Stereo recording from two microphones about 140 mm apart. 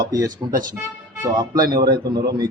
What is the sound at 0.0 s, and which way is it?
A man's voice, 25° right (ahead or behind).